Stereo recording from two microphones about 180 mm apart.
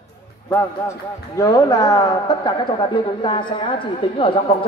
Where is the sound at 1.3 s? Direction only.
20° left (ahead or behind).